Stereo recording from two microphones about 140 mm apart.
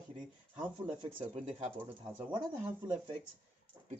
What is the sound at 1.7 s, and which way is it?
Speech, 15° right (ahead or behind).